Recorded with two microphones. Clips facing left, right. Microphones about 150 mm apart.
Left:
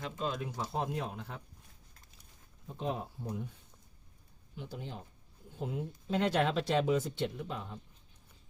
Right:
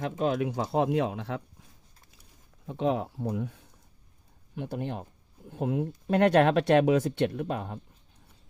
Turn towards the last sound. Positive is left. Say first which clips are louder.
# right 8 dB
turn(degrees=-65)  # may be behind; listen again after turning